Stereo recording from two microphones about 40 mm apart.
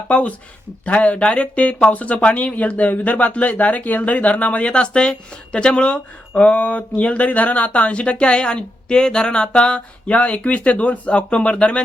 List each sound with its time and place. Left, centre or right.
0.1 s speech: left